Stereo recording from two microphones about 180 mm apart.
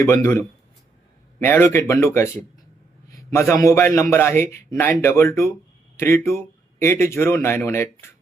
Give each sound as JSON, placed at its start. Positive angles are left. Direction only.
{"t": 0.0, "sound": "a man's voice", "side_deg": 15}